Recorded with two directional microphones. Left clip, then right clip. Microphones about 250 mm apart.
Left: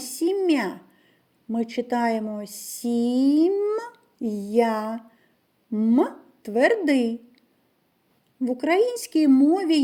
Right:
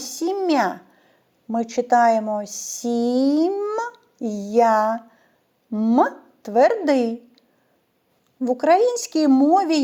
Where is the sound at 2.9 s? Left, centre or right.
Right.